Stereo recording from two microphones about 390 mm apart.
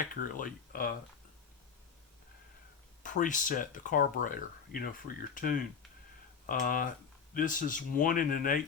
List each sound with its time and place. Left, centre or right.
0.1 s speech: left
3.0 s speech: centre